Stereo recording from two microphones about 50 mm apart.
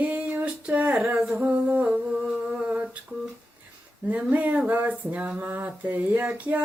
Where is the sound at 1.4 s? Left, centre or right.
Right.